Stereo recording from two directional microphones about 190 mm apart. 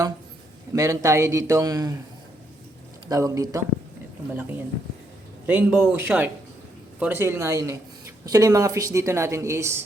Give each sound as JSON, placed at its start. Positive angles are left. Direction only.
{"t": 0.7, "sound": "speech", "side_deg": -15}
{"t": 3.1, "sound": "speech", "side_deg": -15}